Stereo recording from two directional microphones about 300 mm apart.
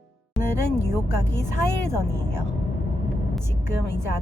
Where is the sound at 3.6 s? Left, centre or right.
Left.